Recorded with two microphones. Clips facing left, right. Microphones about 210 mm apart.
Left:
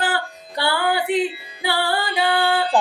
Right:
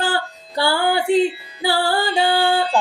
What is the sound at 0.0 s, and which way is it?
Music, 30° right (ahead or behind).